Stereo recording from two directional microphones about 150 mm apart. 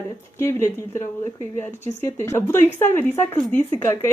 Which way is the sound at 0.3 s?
20° left (ahead or behind).